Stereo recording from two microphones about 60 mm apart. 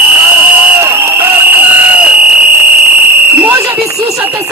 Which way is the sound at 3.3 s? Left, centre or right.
Right.